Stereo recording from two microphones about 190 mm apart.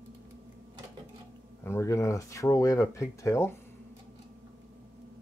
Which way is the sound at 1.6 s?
15° left (ahead or behind).